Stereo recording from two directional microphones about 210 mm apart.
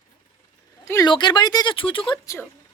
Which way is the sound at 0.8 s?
15° left (ahead or behind).